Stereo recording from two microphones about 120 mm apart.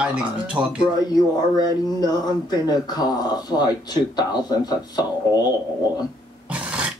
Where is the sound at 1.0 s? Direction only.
35° left (ahead or behind).